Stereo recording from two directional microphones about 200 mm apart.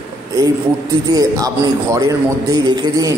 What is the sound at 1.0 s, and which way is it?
A man's voice, 20° right (ahead or behind).